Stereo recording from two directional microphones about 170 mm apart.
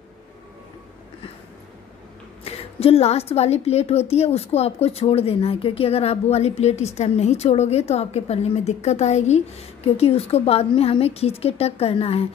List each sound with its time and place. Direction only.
2.4 s a woman's voice: 35° left (ahead or behind)